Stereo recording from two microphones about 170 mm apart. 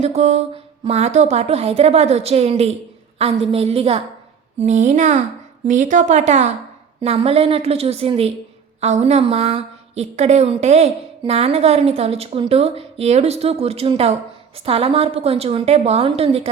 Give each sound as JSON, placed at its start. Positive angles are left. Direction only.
{"t": 0.0, "sound": "a woman's voice", "side_deg": -40}